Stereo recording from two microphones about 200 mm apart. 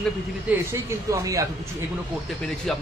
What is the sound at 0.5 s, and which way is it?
Speech, 15° right (ahead or behind).